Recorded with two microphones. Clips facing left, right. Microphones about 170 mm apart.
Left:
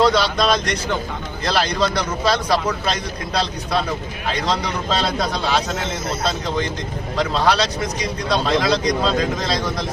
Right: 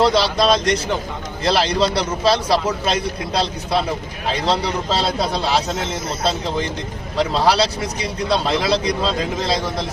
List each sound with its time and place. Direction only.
0.0 s speech: 30° right (ahead or behind)